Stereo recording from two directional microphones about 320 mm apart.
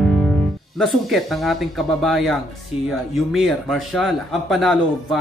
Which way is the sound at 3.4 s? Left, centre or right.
Centre.